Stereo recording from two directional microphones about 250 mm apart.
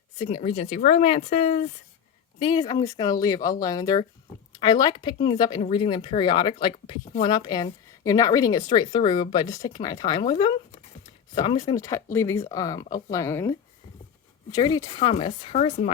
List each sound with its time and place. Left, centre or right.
0.2 s a woman's voice: left